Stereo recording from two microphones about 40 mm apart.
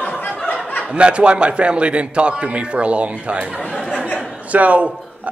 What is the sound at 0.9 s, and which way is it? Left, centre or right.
A man's voice, right.